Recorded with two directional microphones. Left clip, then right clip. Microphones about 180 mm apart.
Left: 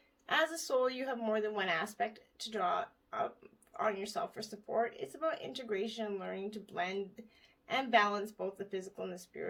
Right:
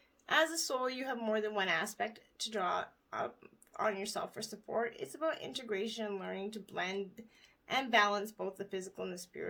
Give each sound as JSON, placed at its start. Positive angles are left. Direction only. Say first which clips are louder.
{"t": 0.3, "sound": "speech", "louder": "right 1 dB", "side_deg": -30}